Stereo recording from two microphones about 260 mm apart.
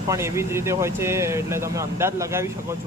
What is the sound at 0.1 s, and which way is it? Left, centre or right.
Speech, centre.